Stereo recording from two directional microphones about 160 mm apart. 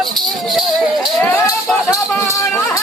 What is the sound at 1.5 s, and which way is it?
Music, 20° left (ahead or behind).